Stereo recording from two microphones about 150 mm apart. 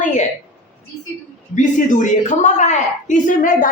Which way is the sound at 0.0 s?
55° left (ahead or behind).